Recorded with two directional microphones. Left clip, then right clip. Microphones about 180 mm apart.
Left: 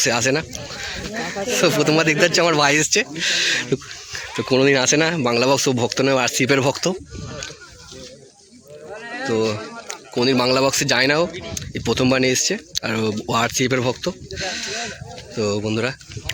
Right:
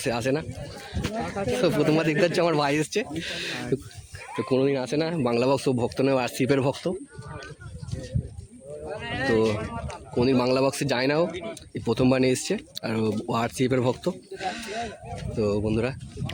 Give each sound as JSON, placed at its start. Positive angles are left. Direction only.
{"t": 0.0, "sound": "speech", "side_deg": 10}
{"t": 1.0, "sound": "speech", "side_deg": 25}
{"t": 9.0, "sound": "a sound", "side_deg": -30}
{"t": 10.2, "sound": "speech", "side_deg": 0}